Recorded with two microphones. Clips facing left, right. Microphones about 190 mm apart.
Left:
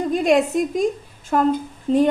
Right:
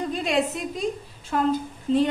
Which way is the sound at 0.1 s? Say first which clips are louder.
Left 9 dB; 45° left (ahead or behind).